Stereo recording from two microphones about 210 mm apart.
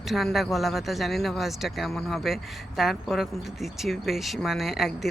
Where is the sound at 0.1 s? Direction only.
Centre (ahead or behind).